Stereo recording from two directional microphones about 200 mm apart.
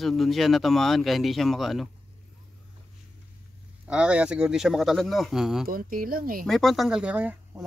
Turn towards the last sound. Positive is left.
turn(degrees=-10)  # may be behind; listen again after turning